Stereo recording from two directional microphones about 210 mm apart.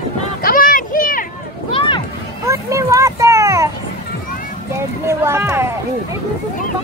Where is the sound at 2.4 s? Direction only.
15° right (ahead or behind).